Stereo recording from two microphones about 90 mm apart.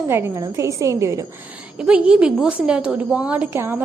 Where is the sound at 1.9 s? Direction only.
15° right (ahead or behind).